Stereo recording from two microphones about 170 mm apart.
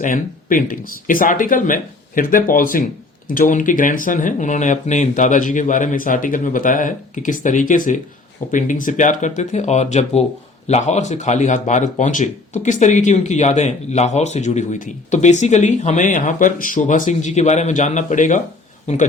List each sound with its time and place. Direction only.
0.0 s speech: 50° left (ahead or behind)